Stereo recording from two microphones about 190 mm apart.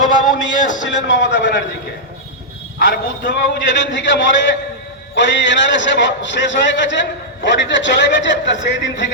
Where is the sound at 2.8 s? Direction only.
65° left (ahead or behind).